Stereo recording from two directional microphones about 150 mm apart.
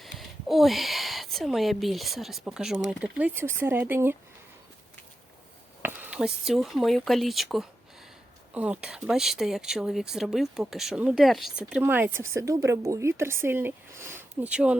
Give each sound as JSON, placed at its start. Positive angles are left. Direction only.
{"t": 0.0, "sound": "speech", "side_deg": 0}
{"t": 5.8, "sound": "speech", "side_deg": -10}